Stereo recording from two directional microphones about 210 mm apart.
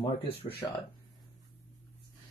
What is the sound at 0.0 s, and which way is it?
Speech, 25° left (ahead or behind).